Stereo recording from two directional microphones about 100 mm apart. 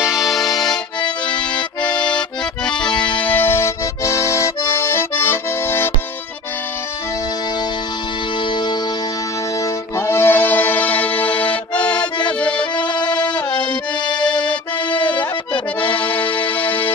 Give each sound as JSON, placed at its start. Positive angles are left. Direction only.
{"t": 0.0, "sound": "accordion", "side_deg": -5}
{"t": 2.0, "sound": "accordion", "side_deg": 10}
{"t": 2.9, "sound": "music", "side_deg": 50}
{"t": 3.2, "sound": "accordion", "side_deg": 20}
{"t": 8.5, "sound": "music", "side_deg": 50}
{"t": 9.6, "sound": "music", "side_deg": 30}
{"t": 12.4, "sound": "accordion", "side_deg": 10}
{"t": 12.9, "sound": "music", "side_deg": 50}
{"t": 14.2, "sound": "music", "side_deg": 15}
{"t": 14.9, "sound": "accordion", "side_deg": 55}
{"t": 15.8, "sound": "accordion", "side_deg": 15}